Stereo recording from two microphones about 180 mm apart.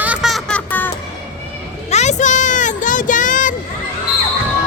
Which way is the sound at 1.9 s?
40° left (ahead or behind).